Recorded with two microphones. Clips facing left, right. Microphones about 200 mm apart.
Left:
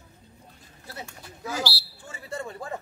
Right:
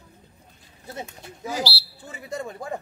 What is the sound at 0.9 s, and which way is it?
Speech, 15° right (ahead or behind).